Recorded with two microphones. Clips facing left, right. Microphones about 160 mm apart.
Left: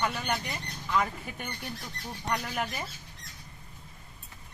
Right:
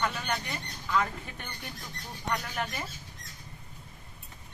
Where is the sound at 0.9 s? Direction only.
10° left (ahead or behind).